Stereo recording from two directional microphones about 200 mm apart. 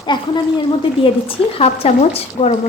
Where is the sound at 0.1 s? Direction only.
20° left (ahead or behind).